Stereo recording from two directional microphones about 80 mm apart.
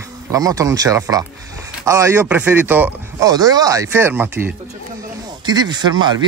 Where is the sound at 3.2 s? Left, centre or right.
Right.